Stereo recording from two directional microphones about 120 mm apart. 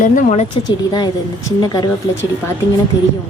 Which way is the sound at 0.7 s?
35° left (ahead or behind).